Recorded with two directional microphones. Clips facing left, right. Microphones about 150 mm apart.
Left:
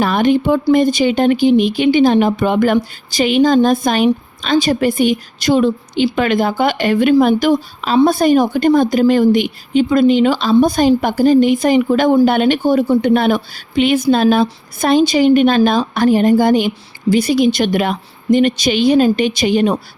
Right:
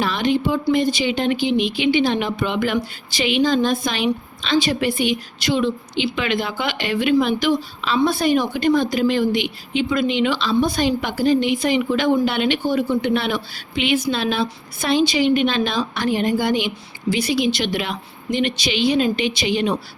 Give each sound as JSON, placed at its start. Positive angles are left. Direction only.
{"t": 0.0, "sound": "speech", "side_deg": 50}